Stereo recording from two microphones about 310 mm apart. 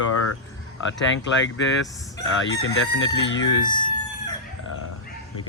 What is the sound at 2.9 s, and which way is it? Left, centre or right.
Speech, left.